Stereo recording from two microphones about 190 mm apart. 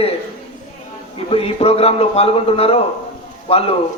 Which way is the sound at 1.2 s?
30° left (ahead or behind).